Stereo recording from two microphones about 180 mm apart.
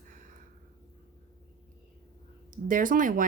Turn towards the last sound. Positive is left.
turn(degrees=-50)  # may be behind; listen again after turning